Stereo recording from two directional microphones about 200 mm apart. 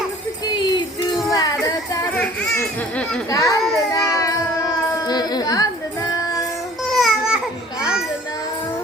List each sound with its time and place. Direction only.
0.5 s music: 20° left (ahead or behind)
2.4 s a sound: 5° left (ahead or behind)
3.9 s baby cry: 15° left (ahead or behind)
4.9 s music: 20° left (ahead or behind)
6.8 s babbling: centre (ahead or behind)
7.8 s a sound: 5° right (ahead or behind)